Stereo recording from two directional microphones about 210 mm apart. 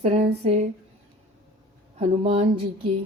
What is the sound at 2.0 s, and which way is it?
Speech, 30° right (ahead or behind).